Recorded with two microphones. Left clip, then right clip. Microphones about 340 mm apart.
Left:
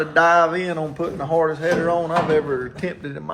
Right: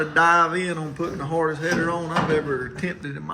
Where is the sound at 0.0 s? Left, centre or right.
Centre.